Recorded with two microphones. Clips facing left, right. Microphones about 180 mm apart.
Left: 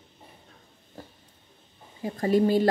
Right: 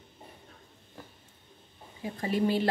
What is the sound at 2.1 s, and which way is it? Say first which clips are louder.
Speech: left 6 dB; 40° left (ahead or behind).